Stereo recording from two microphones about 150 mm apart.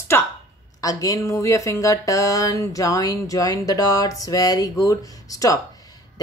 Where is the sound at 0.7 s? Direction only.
25° left (ahead or behind).